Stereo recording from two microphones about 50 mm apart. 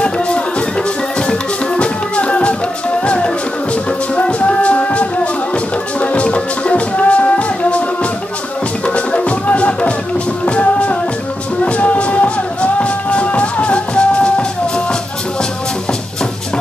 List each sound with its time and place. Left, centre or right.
0.0 s music: left
1.8 s music: left
4.1 s music: left
8.8 s music: left